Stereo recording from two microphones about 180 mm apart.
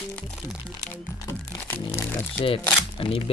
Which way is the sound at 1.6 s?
10° left (ahead or behind).